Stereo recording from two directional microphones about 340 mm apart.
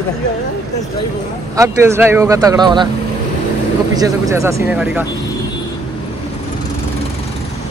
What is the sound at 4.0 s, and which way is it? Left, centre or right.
Speech, centre.